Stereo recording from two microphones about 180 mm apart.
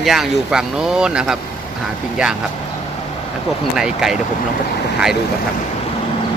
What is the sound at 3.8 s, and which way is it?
Speech, 5° right (ahead or behind).